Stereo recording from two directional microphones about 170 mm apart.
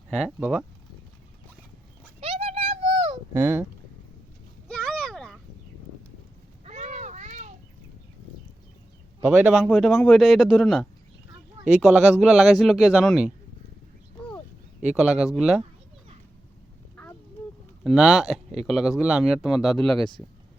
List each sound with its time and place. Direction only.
0.1 s speech: 5° right (ahead or behind)
2.2 s a sound: 35° right (ahead or behind)
3.3 s speech: 10° right (ahead or behind)
4.7 s vehicle: 5° left (ahead or behind)
6.7 s a sound: 45° right (ahead or behind)
9.2 s speech: 5° right (ahead or behind)
14.9 s speech: 5° right (ahead or behind)
17.8 s speech: centre (ahead or behind)